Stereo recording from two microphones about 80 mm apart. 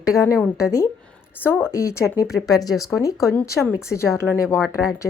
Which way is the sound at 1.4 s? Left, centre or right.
Left.